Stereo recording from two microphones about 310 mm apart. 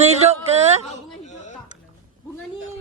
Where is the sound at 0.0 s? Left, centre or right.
Right.